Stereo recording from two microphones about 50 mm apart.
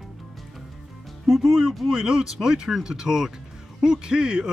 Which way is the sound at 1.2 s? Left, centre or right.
Centre.